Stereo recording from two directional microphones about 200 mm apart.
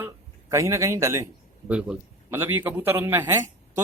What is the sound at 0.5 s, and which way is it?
A man's voice, 15° right (ahead or behind).